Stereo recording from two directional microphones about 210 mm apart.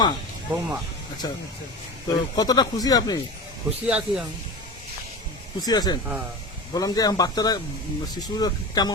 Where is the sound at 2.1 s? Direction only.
20° left (ahead or behind).